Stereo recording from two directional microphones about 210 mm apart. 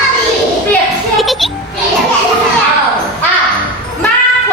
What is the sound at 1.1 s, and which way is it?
Music, centre (ahead or behind).